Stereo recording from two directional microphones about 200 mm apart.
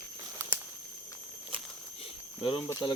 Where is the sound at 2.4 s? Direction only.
25° left (ahead or behind).